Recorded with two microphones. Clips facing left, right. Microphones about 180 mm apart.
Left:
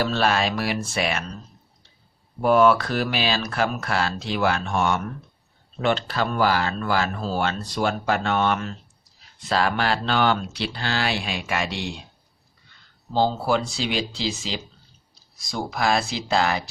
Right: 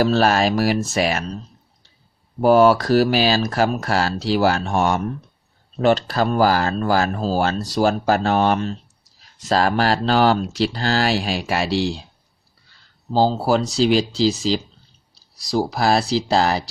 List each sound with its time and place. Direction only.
0.0 s speech: 40° right (ahead or behind)
2.4 s speech: 35° right (ahead or behind)
13.1 s speech: 35° right (ahead or behind)